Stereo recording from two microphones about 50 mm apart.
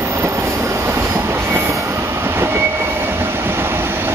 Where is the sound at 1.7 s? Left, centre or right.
Right.